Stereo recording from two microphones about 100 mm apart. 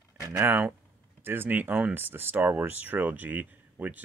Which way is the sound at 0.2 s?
20° right (ahead or behind).